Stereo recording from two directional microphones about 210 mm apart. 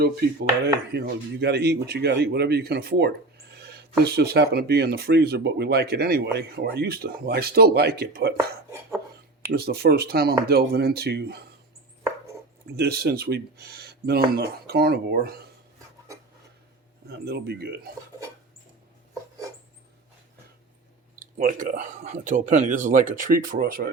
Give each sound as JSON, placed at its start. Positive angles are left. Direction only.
{"t": 0.6, "sound": "speech", "side_deg": -50}
{"t": 9.5, "sound": "speech", "side_deg": -50}
{"t": 12.7, "sound": "speech", "side_deg": -50}
{"t": 17.1, "sound": "speech", "side_deg": -50}
{"t": 21.2, "sound": "speech", "side_deg": -40}